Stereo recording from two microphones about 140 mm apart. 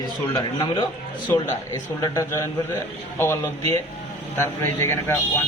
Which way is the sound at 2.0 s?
25° left (ahead or behind).